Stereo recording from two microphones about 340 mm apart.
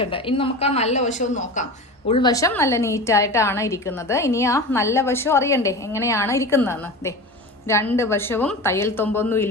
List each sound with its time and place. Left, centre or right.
0.0 s a woman's voice: centre